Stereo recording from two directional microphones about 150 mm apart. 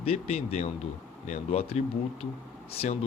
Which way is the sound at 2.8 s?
45° left (ahead or behind).